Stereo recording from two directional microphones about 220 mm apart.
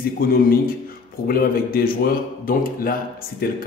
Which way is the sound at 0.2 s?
40° left (ahead or behind).